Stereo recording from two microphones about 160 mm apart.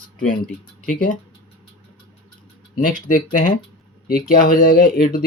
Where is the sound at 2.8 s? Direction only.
55° left (ahead or behind).